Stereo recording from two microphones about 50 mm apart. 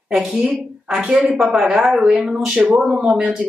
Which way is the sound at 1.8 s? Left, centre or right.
Centre.